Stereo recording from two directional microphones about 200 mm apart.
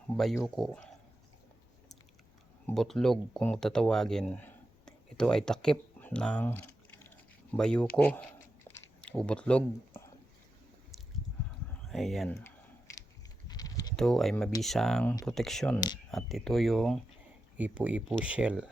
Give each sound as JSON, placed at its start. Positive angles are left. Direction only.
{"t": 0.4, "sound": "speech", "side_deg": 0}
{"t": 2.6, "sound": "speech", "side_deg": 0}
{"t": 11.9, "sound": "speech", "side_deg": 0}
{"t": 12.3, "sound": "speech", "side_deg": 10}
{"t": 13.5, "sound": "typing", "side_deg": 20}
{"t": 13.9, "sound": "speech", "side_deg": 0}